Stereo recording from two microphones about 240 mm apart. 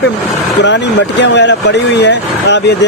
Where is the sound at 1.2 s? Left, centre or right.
Left.